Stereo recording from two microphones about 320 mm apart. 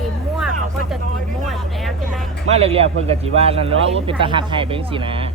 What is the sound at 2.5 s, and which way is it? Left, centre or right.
Speech, centre.